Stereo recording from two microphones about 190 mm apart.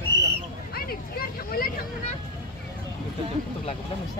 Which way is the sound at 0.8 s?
50° left (ahead or behind).